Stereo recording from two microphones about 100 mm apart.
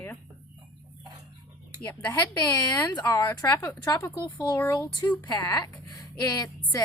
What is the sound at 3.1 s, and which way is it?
A woman's voice, 40° left (ahead or behind).